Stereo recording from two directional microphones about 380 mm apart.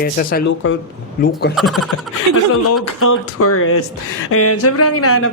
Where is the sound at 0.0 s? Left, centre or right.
Left.